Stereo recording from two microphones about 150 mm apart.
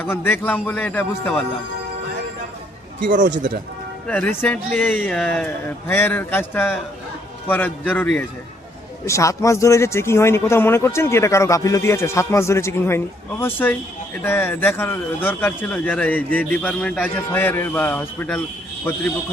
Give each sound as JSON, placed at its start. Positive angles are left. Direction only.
{"t": 0.0, "sound": "a man's voice", "side_deg": 15}
{"t": 4.0, "sound": "a man's voice", "side_deg": 10}
{"t": 9.0, "sound": "a man's voice", "side_deg": 20}